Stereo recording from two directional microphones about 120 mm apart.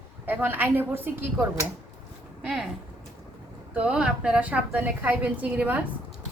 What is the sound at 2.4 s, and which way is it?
Speech, 5° right (ahead or behind).